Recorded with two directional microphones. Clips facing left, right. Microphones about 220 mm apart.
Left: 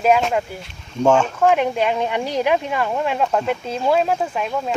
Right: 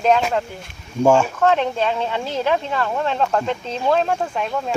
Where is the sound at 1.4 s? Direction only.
10° left (ahead or behind).